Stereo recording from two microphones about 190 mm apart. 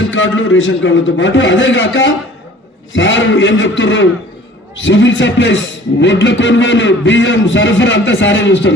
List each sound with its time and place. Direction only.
0.0 s a man's voice: 90° left; by 8.7 s 75° left (ahead or behind)